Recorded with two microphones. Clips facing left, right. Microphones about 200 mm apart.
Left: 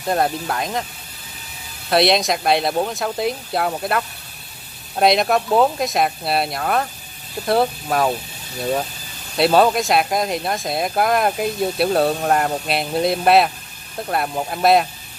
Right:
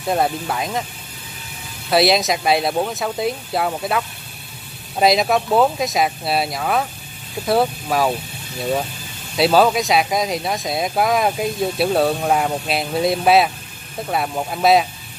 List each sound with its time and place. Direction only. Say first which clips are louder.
0.0 s speech: even; centre (ahead or behind)
1.9 s speech: even; centre (ahead or behind)
9.4 s speech: even; centre (ahead or behind)